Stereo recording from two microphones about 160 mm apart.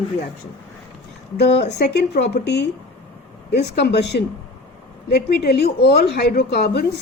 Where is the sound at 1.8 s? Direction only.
90° left.